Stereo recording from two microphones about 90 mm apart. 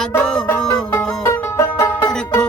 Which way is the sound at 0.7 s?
30° left (ahead or behind).